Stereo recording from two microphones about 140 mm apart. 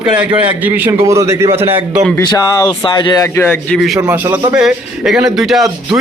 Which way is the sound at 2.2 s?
30° left (ahead or behind).